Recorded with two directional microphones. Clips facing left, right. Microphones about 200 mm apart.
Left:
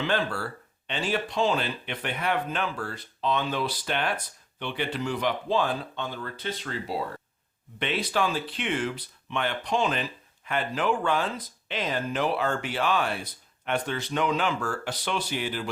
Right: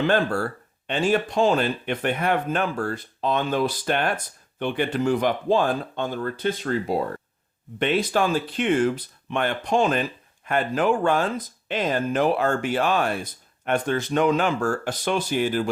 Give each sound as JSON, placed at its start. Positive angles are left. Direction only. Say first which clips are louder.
{"t": 0.0, "sound": "speech", "louder": "right 6 dB", "side_deg": -50}